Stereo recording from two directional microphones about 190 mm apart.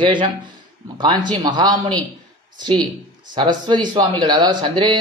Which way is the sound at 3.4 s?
25° right (ahead or behind).